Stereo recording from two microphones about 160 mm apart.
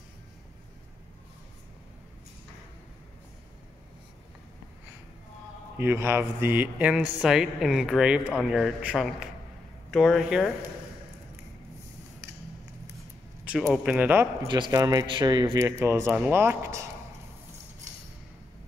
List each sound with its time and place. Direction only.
5.8 s a man's voice: 15° right (ahead or behind)
13.5 s speech: 5° right (ahead or behind)
14.5 s speech: 25° right (ahead or behind)